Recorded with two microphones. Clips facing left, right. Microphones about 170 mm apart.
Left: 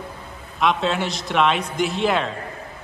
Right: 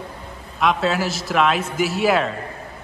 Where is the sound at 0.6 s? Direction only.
Centre (ahead or behind).